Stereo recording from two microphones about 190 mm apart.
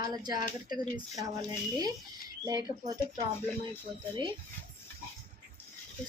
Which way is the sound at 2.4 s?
20° right (ahead or behind).